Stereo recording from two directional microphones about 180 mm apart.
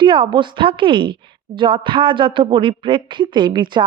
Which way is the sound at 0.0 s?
25° right (ahead or behind).